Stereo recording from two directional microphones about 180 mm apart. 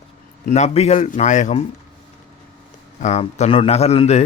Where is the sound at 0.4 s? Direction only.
40° left (ahead or behind).